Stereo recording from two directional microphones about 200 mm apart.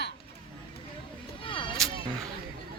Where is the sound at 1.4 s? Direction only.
25° left (ahead or behind).